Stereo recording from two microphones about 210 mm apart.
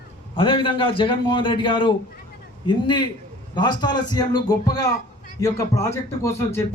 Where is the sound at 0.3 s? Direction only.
25° left (ahead or behind).